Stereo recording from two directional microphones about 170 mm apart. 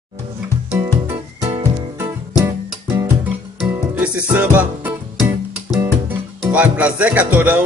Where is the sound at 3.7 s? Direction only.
10° right (ahead or behind).